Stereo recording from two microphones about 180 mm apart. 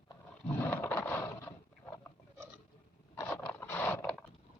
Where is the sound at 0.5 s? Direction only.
10° left (ahead or behind).